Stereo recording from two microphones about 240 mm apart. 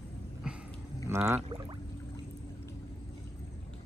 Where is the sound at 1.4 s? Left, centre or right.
Right.